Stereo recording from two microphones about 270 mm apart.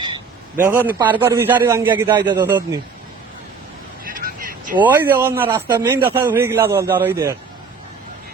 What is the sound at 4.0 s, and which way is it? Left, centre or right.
Vehicle, right.